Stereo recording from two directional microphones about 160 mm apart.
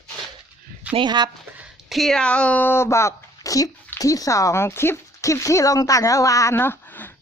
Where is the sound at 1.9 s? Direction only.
Centre (ahead or behind).